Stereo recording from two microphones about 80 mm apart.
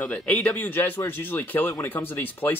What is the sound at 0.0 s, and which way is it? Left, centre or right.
Speech, centre.